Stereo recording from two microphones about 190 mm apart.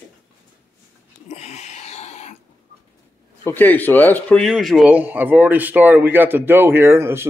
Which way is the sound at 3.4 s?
10° left (ahead or behind).